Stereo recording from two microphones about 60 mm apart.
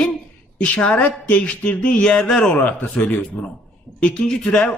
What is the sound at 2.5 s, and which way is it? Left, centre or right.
A man's voice, left.